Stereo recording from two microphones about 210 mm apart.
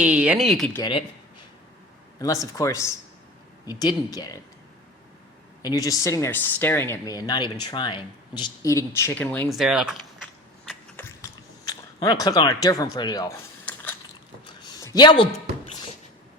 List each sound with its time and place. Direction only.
0.0 s speech: 5° right (ahead or behind)
0.8 s speech: 25° left (ahead or behind)
2.1 s speech: 15° left (ahead or behind)
5.6 s speech: 15° left (ahead or behind); by 10.0 s centre (ahead or behind)
10.7 s biting: 10° left (ahead or behind)
14.4 s a sound: 20° left (ahead or behind)